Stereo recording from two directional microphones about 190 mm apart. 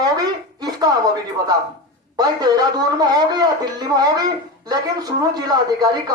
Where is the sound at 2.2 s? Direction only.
20° right (ahead or behind).